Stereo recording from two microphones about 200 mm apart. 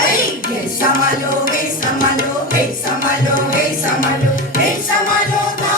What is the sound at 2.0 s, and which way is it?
Music, 45° left (ahead or behind).